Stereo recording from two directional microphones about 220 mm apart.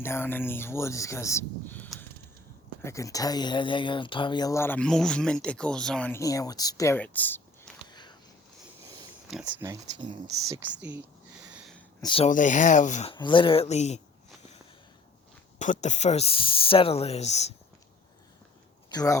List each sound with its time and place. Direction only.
0.0 s speech: 10° left (ahead or behind)
7.9 s a sound: 20° left (ahead or behind)
8.8 s pig: 15° right (ahead or behind)
9.3 s speech: 5° right (ahead or behind)
10.8 s speech: 5° right (ahead or behind)
11.5 s a sound: centre (ahead or behind)
12.0 s speech: 25° left (ahead or behind)
12.3 s speech: 35° left (ahead or behind)
13.1 s speech: 20° left (ahead or behind)
15.5 s speech: 35° left (ahead or behind)
18.9 s speech: 15° left (ahead or behind)